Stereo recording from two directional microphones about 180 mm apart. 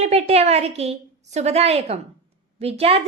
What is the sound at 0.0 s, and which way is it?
A woman's voice, 35° right (ahead or behind).